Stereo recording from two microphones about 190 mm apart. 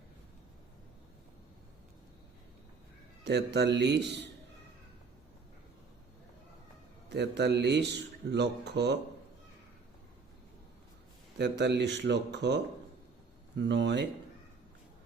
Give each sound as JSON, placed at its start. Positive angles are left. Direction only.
{"t": 3.2, "sound": "speech", "side_deg": -60}
{"t": 7.1, "sound": "speech", "side_deg": -60}
{"t": 11.3, "sound": "speech", "side_deg": -60}
{"t": 13.6, "sound": "speech", "side_deg": -65}